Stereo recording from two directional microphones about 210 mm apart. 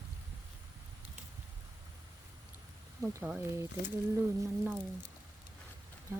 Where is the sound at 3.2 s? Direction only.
10° right (ahead or behind).